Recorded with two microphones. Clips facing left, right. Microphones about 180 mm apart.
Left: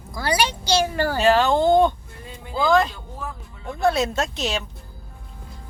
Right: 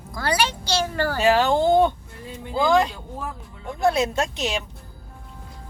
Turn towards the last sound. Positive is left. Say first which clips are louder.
# even
turn(degrees=-15)  # may be behind; listen again after turning